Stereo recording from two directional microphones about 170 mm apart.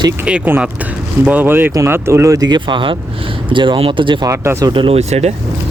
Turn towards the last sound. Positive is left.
turn(degrees=-40)  # may be behind; listen again after turning